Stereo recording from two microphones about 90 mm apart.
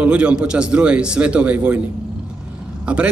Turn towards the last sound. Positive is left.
turn(degrees=-15)  # may be behind; listen again after turning